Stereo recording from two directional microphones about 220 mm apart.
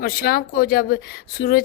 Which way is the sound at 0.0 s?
45° left (ahead or behind).